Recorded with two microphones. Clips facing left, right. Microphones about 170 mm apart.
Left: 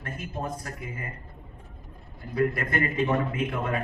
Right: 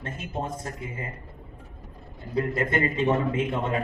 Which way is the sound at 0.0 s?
25° right (ahead or behind).